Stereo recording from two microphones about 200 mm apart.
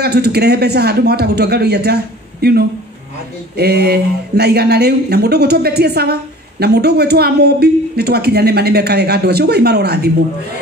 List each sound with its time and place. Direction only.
0.0 s a woman's voice: 55° right (ahead or behind)